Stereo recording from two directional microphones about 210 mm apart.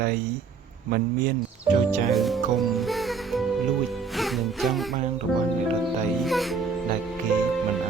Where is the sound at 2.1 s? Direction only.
Centre (ahead or behind).